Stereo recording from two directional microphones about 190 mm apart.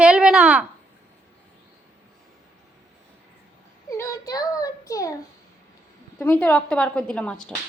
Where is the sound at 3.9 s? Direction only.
15° left (ahead or behind).